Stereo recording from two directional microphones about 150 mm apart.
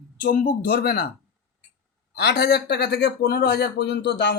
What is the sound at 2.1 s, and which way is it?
Speech, 90° left.